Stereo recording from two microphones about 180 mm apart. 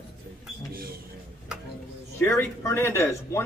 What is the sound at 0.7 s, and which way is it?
Speech, 55° right (ahead or behind).